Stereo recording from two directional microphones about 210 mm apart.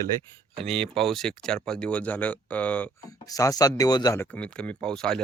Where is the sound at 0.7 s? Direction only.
Centre (ahead or behind).